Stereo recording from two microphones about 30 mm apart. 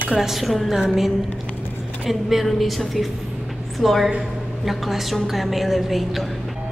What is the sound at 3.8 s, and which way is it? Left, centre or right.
A woman's voice, centre.